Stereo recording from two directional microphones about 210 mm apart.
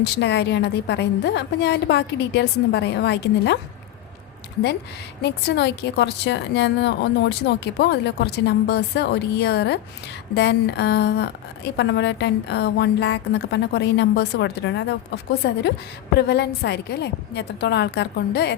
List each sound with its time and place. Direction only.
0.0 s a woman's voice: 55° left (ahead or behind)
5.2 s a woman's voice: 55° left (ahead or behind)